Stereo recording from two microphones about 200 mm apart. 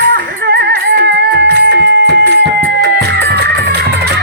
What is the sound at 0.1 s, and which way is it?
Music, 55° right (ahead or behind).